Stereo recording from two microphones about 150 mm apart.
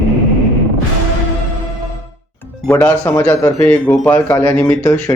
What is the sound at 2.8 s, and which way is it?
Speech, 10° left (ahead or behind).